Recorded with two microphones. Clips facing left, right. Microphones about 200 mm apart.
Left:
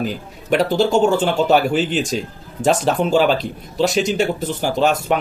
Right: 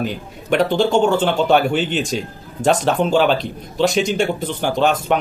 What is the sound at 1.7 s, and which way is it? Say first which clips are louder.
Speech: left 1 dB; 40° left (ahead or behind).